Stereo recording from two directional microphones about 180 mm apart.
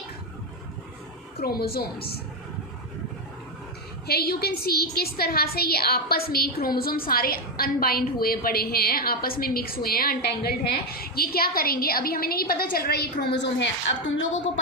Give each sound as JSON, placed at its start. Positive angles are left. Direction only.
{"t": 1.4, "sound": "a woman's voice", "side_deg": 60}
{"t": 4.0, "sound": "a woman's voice", "side_deg": 60}
{"t": 14.1, "sound": "speech", "side_deg": 90}